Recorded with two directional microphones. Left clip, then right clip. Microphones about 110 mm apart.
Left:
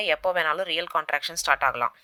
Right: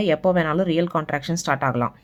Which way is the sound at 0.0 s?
30° left (ahead or behind).